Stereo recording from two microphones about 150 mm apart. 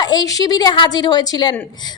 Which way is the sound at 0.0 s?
25° left (ahead or behind).